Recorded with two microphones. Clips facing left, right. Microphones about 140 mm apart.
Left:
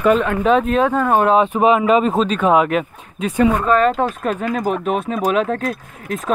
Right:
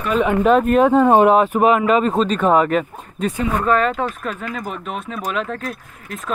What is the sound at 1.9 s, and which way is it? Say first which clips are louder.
Speech: left 1 dB; 5° left (ahead or behind).